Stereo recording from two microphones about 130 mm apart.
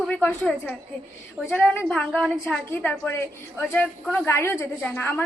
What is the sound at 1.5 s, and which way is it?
A woman's voice, 5° left (ahead or behind).